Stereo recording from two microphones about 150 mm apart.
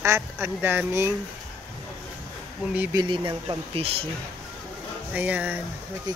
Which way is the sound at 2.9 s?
35° right (ahead or behind).